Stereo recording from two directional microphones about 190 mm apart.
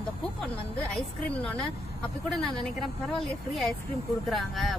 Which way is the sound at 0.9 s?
5° left (ahead or behind).